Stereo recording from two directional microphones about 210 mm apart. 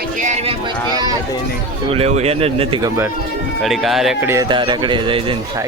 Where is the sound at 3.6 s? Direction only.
Centre (ahead or behind).